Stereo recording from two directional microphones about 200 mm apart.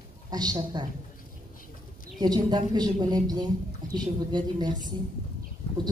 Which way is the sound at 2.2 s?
20° right (ahead or behind).